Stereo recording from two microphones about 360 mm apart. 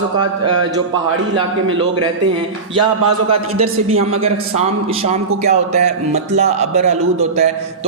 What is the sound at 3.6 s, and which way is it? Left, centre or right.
Speech, centre.